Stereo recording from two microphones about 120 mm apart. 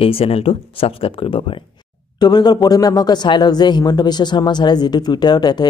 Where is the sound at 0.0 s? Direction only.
55° left (ahead or behind).